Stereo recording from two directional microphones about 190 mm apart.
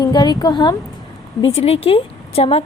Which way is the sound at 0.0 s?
20° left (ahead or behind).